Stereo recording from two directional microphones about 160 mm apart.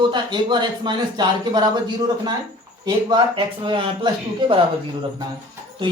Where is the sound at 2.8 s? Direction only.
30° right (ahead or behind).